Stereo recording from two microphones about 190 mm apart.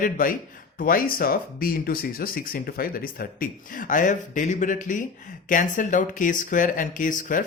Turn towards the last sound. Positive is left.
turn(degrees=45)  # may be behind; listen again after turning